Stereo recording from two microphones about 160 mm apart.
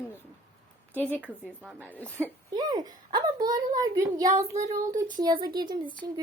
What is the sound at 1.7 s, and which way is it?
Speech, 10° left (ahead or behind).